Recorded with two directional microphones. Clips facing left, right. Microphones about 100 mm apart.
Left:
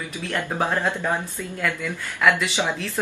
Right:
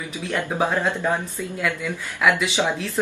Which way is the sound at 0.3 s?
5° right (ahead or behind).